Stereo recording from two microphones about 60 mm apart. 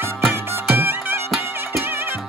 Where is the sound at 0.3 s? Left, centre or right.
Right.